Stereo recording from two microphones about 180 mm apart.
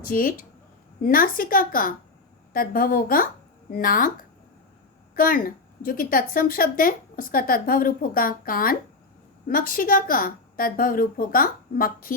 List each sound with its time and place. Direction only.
0.1 s a woman's voice: 50° left (ahead or behind)
5.1 s a woman's voice: 50° left (ahead or behind)